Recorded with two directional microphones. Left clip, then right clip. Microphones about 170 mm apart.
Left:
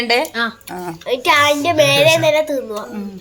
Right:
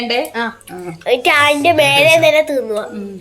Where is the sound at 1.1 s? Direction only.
15° left (ahead or behind).